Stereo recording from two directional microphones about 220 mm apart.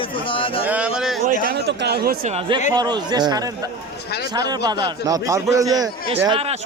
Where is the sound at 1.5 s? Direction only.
50° right (ahead or behind).